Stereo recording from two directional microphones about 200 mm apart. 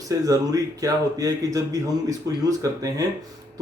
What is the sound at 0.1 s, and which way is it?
Speech, 15° right (ahead or behind).